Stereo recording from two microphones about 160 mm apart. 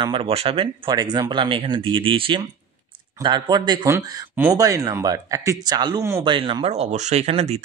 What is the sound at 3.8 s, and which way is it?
Speech, 15° right (ahead or behind).